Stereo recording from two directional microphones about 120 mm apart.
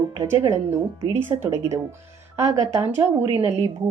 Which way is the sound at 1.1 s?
20° right (ahead or behind).